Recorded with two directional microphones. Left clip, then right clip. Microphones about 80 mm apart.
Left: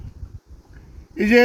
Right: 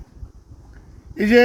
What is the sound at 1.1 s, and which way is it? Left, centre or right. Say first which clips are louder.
Speech: right 1 dB; centre.